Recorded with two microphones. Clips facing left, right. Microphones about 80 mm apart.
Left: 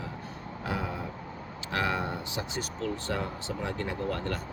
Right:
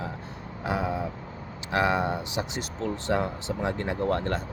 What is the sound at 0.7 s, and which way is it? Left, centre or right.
Vehicle, centre.